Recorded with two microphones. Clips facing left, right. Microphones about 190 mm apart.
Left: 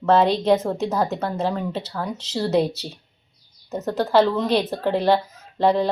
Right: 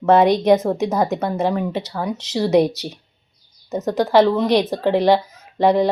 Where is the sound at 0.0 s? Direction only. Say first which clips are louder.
Right 4 dB; 15° right (ahead or behind).